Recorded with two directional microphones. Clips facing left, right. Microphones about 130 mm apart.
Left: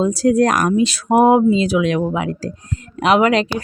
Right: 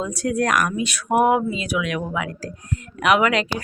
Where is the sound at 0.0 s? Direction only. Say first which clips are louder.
Left 8 dB; 30° left (ahead or behind).